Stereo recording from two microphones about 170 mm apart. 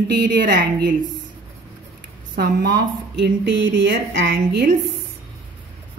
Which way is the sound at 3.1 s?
90° right.